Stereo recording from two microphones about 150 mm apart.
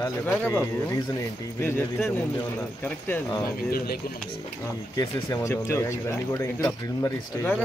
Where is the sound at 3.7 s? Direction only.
80° left.